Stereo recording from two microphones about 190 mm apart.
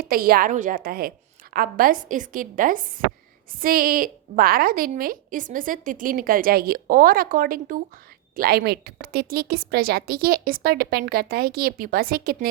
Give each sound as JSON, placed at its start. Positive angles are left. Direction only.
{"t": 0.0, "sound": "a woman's voice", "side_deg": -50}